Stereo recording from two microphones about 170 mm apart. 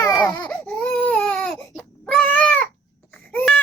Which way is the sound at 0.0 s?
25° left (ahead or behind).